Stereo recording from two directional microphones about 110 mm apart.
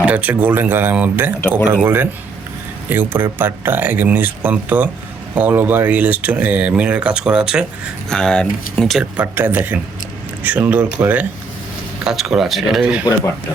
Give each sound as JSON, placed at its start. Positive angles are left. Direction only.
{"t": 0.0, "sound": "speech", "side_deg": -15}
{"t": 1.4, "sound": "speech", "side_deg": 15}
{"t": 1.6, "sound": "speech", "side_deg": -15}
{"t": 8.1, "sound": "speech", "side_deg": 5}
{"t": 9.1, "sound": "speech", "side_deg": -20}
{"t": 12.0, "sound": "speech", "side_deg": -5}